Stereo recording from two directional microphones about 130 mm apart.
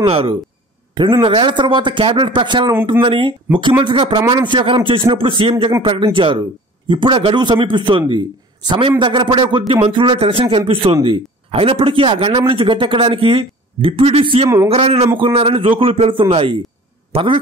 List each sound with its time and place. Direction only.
0.0 s a man's voice: 45° right (ahead or behind)